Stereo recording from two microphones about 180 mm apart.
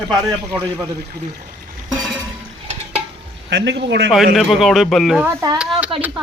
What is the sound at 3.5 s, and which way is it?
Speech, 75° right (ahead or behind).